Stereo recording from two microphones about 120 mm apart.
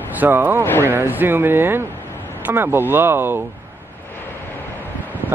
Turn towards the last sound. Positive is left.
turn(degrees=15)  # may be behind; listen again after turning